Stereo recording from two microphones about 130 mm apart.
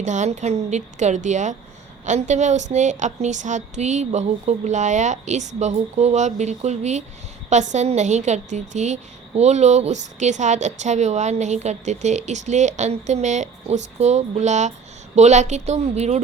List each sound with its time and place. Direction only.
0.0 s a woman's voice: 65° right (ahead or behind)